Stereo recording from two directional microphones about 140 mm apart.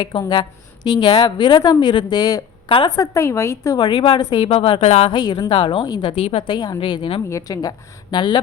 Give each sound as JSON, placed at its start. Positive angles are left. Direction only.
{"t": 0.0, "sound": "a woman's voice", "side_deg": 30}
{"t": 2.9, "sound": "a woman's voice", "side_deg": 20}
{"t": 4.4, "sound": "a woman's voice", "side_deg": 40}
{"t": 5.1, "sound": "a woman's voice", "side_deg": 30}
{"t": 7.3, "sound": "a woman's voice", "side_deg": 25}